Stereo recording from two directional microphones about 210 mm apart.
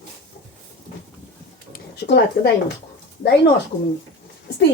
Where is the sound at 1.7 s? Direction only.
55° left (ahead or behind).